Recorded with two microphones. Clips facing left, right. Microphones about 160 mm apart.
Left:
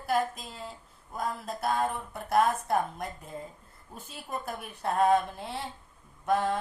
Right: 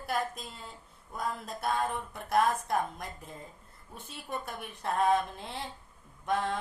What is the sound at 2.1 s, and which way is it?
Speech, 30° left (ahead or behind).